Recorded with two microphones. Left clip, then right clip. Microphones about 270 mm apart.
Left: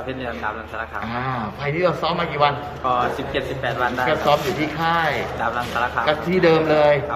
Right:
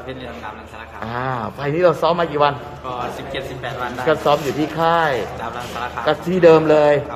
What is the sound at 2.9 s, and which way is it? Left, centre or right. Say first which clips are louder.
Speech: left 1 dB; centre.